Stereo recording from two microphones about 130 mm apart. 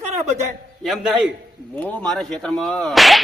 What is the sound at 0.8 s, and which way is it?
Speech, centre (ahead or behind).